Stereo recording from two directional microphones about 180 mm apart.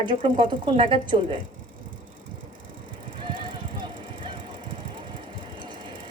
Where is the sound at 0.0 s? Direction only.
30° right (ahead or behind).